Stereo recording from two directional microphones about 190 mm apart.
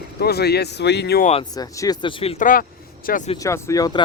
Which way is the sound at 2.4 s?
50° left (ahead or behind).